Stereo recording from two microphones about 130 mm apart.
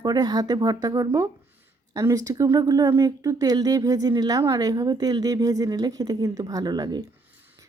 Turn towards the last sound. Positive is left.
turn(degrees=-30)  # may be behind; listen again after turning